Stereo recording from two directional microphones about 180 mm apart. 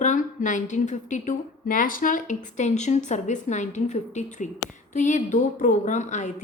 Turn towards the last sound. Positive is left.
turn(degrees=40)  # may be behind; listen again after turning